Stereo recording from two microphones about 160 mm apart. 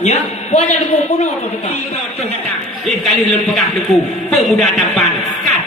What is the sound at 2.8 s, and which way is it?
A man's voice, centre (ahead or behind).